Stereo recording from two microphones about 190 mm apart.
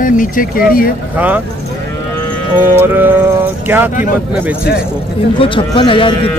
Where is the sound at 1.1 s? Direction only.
10° right (ahead or behind).